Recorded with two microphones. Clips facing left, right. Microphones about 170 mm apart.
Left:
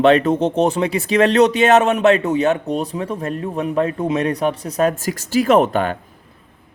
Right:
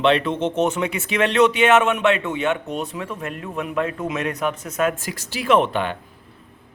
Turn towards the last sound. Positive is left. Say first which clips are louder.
# left 4 dB
turn(degrees=45)  # may be behind; listen again after turning